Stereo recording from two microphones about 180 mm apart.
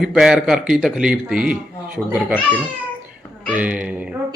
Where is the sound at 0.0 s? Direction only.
Centre (ahead or behind).